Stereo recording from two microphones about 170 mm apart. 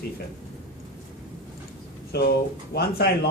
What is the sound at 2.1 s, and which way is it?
Speech, 70° left (ahead or behind).